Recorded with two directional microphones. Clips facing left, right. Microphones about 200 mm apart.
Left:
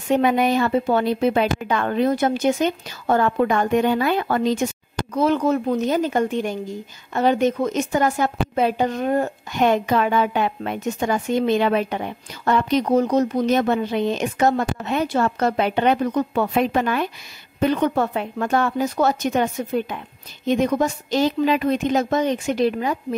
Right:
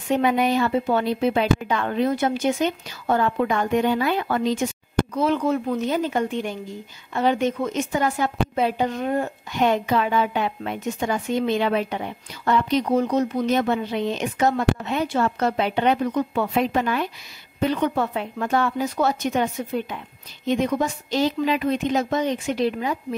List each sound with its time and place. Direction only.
0.2 s a woman's voice: 50° left (ahead or behind)